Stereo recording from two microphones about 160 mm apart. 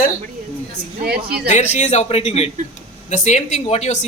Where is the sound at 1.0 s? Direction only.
80° right.